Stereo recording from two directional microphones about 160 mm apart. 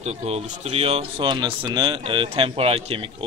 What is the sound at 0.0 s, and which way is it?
Speech, 40° right (ahead or behind).